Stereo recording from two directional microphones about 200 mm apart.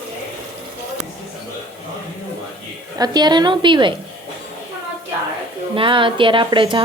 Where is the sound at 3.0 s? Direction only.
20° right (ahead or behind).